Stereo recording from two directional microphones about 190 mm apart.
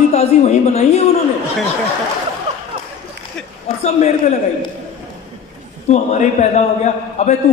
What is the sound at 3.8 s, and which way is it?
Speech, 35° left (ahead or behind).